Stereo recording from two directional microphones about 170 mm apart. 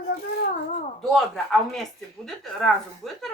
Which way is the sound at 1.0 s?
Centre (ahead or behind).